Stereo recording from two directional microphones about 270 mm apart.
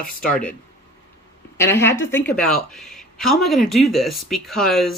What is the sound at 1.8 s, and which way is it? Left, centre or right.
A woman's voice, centre.